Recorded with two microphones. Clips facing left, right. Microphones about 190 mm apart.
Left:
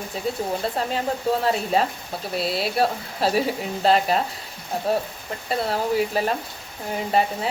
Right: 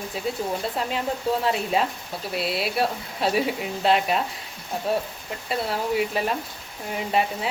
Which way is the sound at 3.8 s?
35° left (ahead or behind).